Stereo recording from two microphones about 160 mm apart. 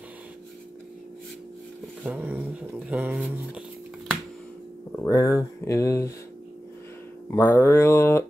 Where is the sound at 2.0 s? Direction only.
10° right (ahead or behind).